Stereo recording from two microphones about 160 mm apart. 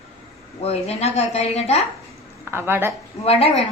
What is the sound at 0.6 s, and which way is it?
Speech, 40° left (ahead or behind).